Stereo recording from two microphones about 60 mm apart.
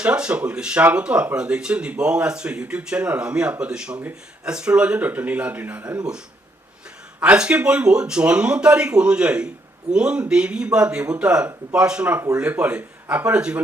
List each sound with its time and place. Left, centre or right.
0.0 s speech: centre
7.2 s speech: centre